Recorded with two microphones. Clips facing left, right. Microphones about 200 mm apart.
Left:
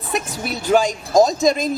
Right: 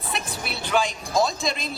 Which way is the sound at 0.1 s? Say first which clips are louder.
Left 8 dB; 40° left (ahead or behind).